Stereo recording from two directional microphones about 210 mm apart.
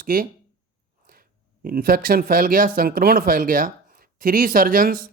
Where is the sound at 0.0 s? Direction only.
45° right (ahead or behind).